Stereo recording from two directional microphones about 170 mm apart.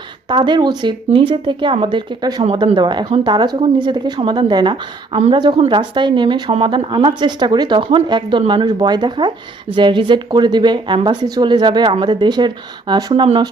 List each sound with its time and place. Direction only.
0.3 s speech: 25° right (ahead or behind)